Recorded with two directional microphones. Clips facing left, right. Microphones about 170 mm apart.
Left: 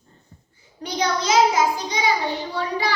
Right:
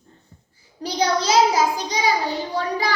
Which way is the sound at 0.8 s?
35° right (ahead or behind).